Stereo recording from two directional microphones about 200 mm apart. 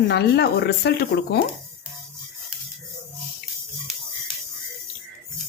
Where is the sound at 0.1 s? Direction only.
55° left (ahead or behind).